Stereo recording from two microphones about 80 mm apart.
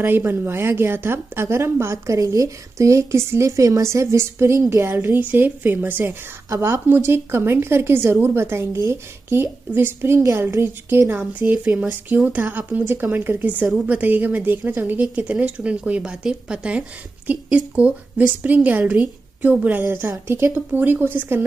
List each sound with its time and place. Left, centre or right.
0.0 s a woman's voice: right